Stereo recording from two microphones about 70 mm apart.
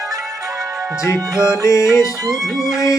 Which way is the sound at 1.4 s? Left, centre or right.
Left.